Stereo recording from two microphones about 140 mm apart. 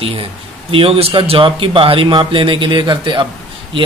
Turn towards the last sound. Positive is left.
turn(degrees=-35)  # may be behind; listen again after turning